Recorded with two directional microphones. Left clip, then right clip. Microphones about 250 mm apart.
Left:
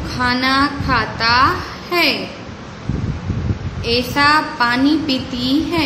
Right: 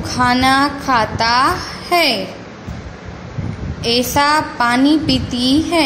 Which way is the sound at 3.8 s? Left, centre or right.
Right.